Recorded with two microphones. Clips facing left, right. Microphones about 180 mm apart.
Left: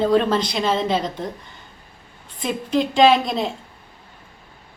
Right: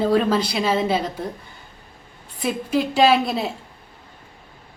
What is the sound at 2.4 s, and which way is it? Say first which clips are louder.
A woman's voice: even; 5° right (ahead or behind).